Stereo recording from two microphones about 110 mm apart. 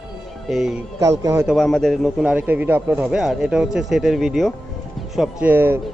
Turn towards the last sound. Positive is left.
turn(degrees=-20)  # may be behind; listen again after turning